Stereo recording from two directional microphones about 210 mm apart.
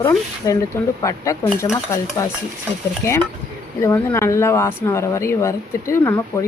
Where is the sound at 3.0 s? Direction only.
15° left (ahead or behind).